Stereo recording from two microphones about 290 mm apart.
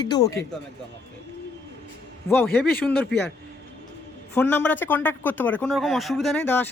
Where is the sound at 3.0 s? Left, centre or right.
Left.